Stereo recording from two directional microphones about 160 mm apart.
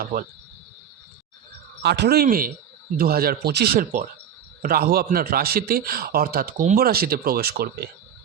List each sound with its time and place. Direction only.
0.0 s speech: 65° right (ahead or behind)
1.8 s a man's voice: 90° right